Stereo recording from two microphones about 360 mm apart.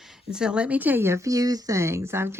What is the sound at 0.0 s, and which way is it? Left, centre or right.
Speech, centre.